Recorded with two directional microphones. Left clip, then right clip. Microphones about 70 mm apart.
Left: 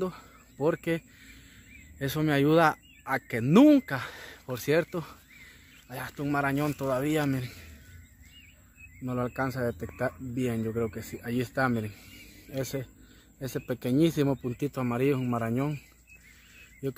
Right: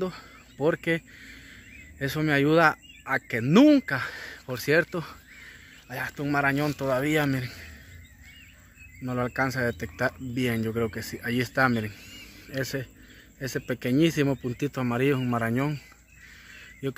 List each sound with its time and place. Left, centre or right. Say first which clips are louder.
0.6 s speech: right 3 dB; centre
2.0 s speech: right 2 dB; left
3.8 s speech: right 5 dB; left
4.9 s speech: right 3 dB; centre
9.0 s a man's voice: right 4 dB; centre